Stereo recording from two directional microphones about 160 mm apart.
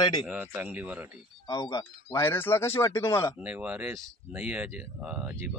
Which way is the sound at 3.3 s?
10° right (ahead or behind).